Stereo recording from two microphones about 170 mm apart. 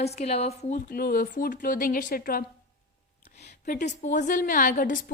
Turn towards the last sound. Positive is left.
turn(degrees=50)  # may be behind; listen again after turning